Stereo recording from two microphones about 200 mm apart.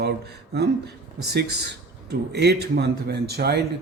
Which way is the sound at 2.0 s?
55° right (ahead or behind).